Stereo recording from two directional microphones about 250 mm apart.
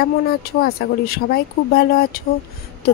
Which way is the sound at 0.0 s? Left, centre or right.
Left.